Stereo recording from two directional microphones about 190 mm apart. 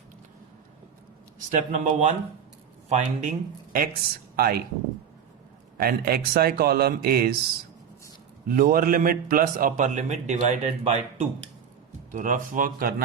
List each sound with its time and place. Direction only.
1.5 s a man's voice: 35° right (ahead or behind); by 4.6 s 50° right (ahead or behind)
5.7 s a man's voice: 50° right (ahead or behind)
8.4 s a man's voice: 50° right (ahead or behind)